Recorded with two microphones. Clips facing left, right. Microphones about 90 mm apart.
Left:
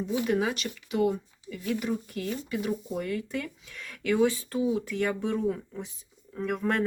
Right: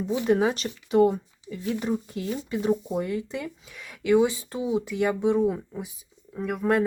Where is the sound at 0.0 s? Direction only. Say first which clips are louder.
Right 4 dB; 30° right (ahead or behind).